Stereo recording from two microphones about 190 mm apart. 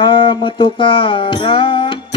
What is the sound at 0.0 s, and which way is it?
Music, 25° left (ahead or behind).